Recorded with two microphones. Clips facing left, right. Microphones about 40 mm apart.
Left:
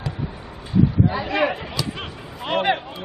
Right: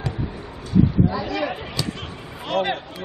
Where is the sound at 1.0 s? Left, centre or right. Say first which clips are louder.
Left 2 dB; left.